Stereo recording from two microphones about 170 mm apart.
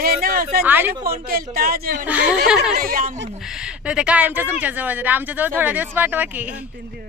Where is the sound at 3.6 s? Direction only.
5° right (ahead or behind).